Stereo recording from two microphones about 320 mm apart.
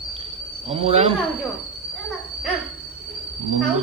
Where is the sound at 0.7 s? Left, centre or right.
Centre.